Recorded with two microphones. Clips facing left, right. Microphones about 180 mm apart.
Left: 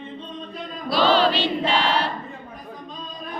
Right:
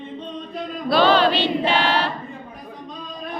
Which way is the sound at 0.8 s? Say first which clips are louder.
Right 2 dB; 55° right (ahead or behind).